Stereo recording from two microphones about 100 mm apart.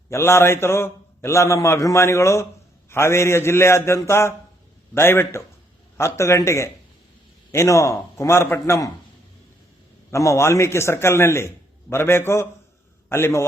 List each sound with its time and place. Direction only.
0.1 s a man's voice: 25° left (ahead or behind)
10.1 s a man's voice: 30° left (ahead or behind)